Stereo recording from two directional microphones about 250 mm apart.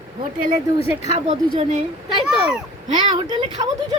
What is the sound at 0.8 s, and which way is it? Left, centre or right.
Speech, left.